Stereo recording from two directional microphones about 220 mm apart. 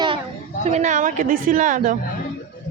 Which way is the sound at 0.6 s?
30° right (ahead or behind).